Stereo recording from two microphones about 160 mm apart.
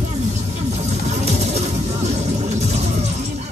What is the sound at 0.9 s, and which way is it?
Music, 45° right (ahead or behind).